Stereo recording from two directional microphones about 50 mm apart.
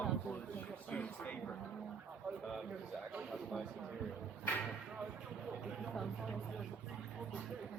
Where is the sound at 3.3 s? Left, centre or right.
Centre.